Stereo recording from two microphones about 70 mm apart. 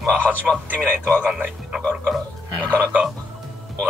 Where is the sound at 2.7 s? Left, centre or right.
Centre.